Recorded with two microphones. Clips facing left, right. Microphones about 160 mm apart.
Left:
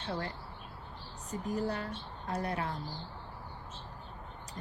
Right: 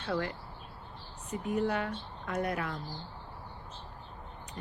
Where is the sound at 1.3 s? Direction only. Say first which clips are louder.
Right 3 dB; 35° left (ahead or behind).